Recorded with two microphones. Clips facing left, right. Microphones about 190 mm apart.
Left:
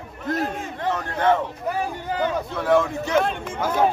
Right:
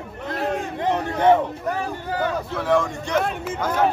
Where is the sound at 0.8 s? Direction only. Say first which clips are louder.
Right 3 dB; 15° right (ahead or behind).